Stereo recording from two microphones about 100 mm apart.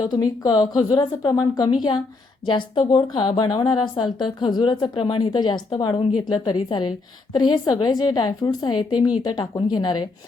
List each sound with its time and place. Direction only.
0.0 s a woman's voice: 40° left (ahead or behind)